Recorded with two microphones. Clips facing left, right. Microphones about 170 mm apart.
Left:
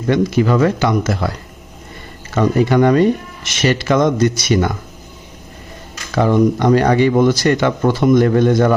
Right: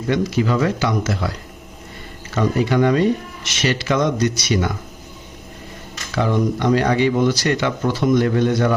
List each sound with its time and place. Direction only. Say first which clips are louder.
0.1 s speech: left 5 dB; 55° left (ahead or behind)
2.3 s speech: left 4 dB; 50° left (ahead or behind)
6.1 s speech: left 6 dB; 50° left (ahead or behind)